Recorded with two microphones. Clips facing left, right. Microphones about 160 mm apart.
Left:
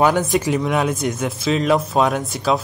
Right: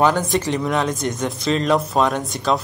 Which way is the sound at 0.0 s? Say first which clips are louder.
Left 1 dB; 15° left (ahead or behind).